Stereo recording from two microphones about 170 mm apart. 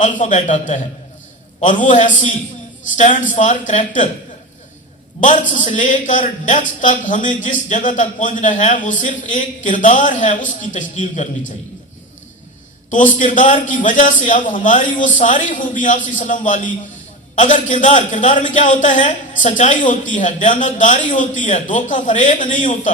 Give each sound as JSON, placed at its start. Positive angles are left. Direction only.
{"t": 0.0, "sound": "a man's voice", "side_deg": 50}
{"t": 5.2, "sound": "a man's voice", "side_deg": 45}
{"t": 12.9, "sound": "a man's voice", "side_deg": 50}